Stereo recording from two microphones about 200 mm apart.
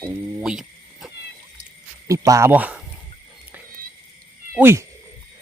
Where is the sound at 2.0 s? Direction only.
15° right (ahead or behind).